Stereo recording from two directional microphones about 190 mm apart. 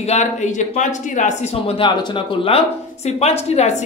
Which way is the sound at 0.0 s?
35° left (ahead or behind).